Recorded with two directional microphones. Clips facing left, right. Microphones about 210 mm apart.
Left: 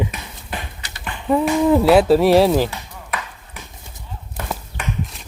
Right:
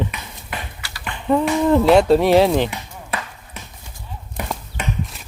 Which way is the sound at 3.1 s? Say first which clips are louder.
Right 1 dB; 30° right (ahead or behind).